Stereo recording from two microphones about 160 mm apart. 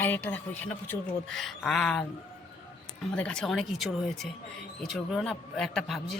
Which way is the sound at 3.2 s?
5° left (ahead or behind).